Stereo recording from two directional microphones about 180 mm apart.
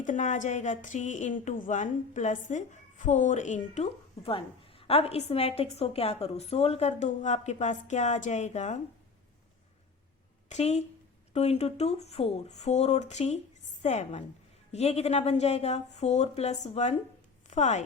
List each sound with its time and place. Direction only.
0.0 s a woman's voice: 45° left (ahead or behind)
10.5 s a woman's voice: 35° left (ahead or behind)